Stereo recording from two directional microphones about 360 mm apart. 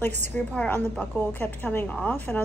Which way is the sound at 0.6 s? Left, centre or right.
Centre.